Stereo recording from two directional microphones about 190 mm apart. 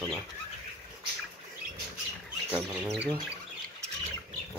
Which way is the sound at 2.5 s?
5° right (ahead or behind).